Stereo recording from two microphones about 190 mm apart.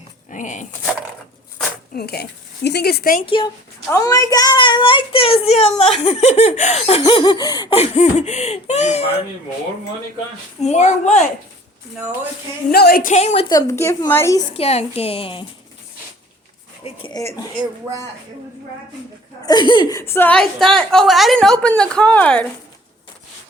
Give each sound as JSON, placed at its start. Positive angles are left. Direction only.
{"t": 0.3, "sound": "speech", "side_deg": 40}
{"t": 2.0, "sound": "speech", "side_deg": 55}
{"t": 3.2, "sound": "a woman's voice", "side_deg": 25}
{"t": 10.6, "sound": "a woman's voice", "side_deg": 35}
{"t": 12.7, "sound": "a woman's voice", "side_deg": 55}
{"t": 13.5, "sound": "speech", "side_deg": 15}
{"t": 14.5, "sound": "a woman's voice", "side_deg": 35}
{"t": 16.8, "sound": "speech", "side_deg": 25}
{"t": 19.4, "sound": "a woman's voice", "side_deg": 20}